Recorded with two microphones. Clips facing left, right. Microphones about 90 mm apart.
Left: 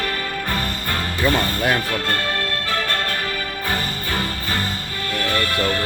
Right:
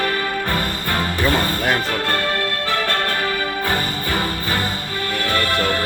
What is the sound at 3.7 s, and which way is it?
Music, 20° right (ahead or behind).